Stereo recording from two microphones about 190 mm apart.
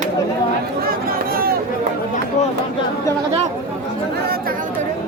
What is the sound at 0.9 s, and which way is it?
Chatter, 50° right (ahead or behind).